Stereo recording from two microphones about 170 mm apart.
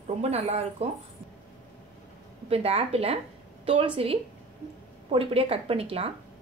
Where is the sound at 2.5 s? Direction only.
35° right (ahead or behind).